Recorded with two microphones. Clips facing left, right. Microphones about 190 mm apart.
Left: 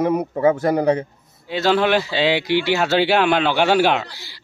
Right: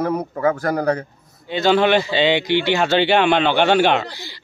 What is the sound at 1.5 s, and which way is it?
Speech, 5° left (ahead or behind).